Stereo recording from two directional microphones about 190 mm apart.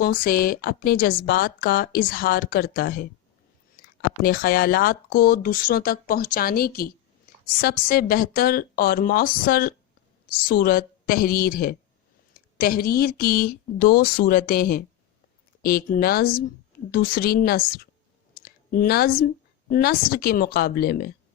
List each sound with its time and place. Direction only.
0.0 s speech: 50° left (ahead or behind)
4.2 s speech: 50° left (ahead or behind)